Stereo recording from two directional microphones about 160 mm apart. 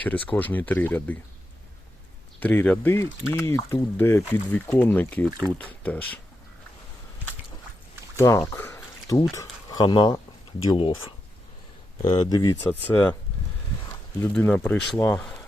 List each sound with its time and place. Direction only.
0.0 s speech: 10° left (ahead or behind)
2.4 s speech: 10° left (ahead or behind)
8.1 s speech: 20° left (ahead or behind)
8.4 s a sound: 10° left (ahead or behind)
9.3 s speech: 20° left (ahead or behind)
12.0 s speech: 25° left (ahead or behind)
14.2 s speech: 10° left (ahead or behind)